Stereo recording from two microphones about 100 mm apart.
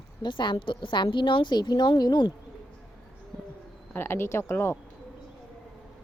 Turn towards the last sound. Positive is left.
turn(degrees=25)  # may be behind; listen again after turning